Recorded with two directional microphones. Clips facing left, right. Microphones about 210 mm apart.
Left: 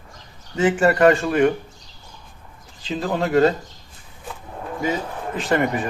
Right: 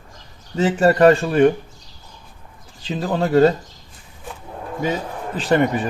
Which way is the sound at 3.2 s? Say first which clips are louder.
Right 3 dB; 30° right (ahead or behind).